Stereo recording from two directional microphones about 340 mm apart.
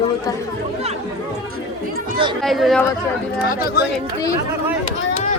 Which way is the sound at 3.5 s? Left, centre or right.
Left.